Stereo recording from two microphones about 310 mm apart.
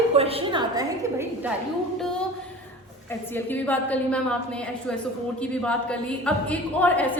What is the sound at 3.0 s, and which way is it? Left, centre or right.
A woman's voice, centre.